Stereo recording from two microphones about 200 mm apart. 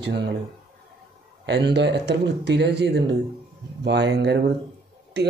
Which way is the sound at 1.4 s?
55° right (ahead or behind).